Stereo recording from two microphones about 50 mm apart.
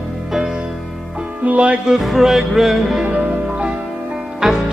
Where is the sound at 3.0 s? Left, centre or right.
Right.